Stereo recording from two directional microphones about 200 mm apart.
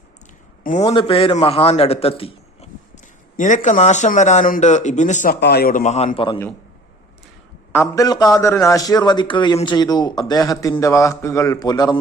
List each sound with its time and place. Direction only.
0.8 s a man's voice: 20° left (ahead or behind); by 5.4 s 40° left (ahead or behind)
5.4 s a man's voice: 55° left (ahead or behind); by 6.4 s 25° left (ahead or behind)
7.7 s a man's voice: 15° left (ahead or behind)